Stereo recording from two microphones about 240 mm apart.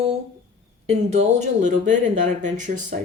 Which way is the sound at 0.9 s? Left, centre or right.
Right.